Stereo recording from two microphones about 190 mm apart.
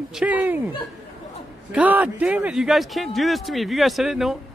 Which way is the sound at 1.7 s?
10° right (ahead or behind).